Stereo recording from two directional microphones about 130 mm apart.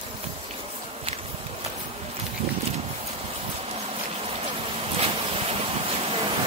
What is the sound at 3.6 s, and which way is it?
Vehicle, 50° right (ahead or behind).